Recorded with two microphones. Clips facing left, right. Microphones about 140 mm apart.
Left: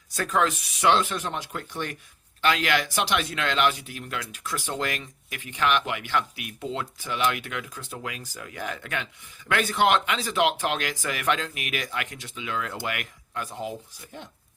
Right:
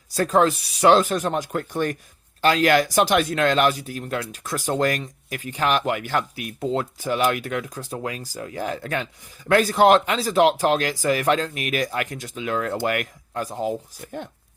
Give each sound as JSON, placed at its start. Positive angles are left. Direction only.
{"t": 0.1, "sound": "speech", "side_deg": -35}